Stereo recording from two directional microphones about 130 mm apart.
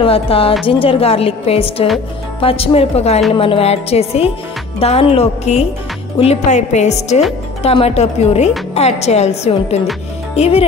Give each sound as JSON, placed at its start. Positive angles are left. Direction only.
{"t": 0.0, "sound": "a woman's voice", "side_deg": 45}